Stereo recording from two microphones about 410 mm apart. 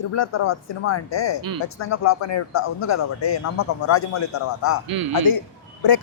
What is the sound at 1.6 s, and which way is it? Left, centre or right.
A man's voice, left.